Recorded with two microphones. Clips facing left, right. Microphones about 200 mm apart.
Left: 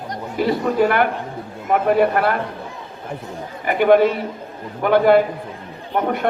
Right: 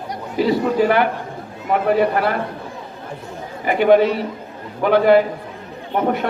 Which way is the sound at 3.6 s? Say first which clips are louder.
Even; 50° left (ahead or behind).